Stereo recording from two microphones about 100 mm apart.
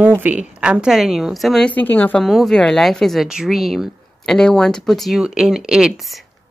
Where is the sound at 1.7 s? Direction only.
15° left (ahead or behind).